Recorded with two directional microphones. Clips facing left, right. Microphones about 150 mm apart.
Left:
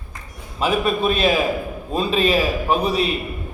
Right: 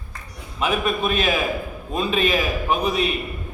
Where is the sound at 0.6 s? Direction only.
35° left (ahead or behind).